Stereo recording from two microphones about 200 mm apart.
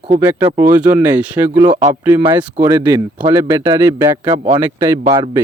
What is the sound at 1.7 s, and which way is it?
Speech, 40° right (ahead or behind).